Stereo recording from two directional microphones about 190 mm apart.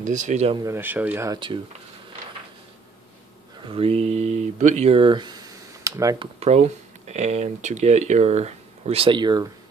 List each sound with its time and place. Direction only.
0.0 s speech: 40° right (ahead or behind)
0.7 s speech: 10° right (ahead or behind)
3.6 s speech: 30° right (ahead or behind)
6.4 s speech: 35° right (ahead or behind)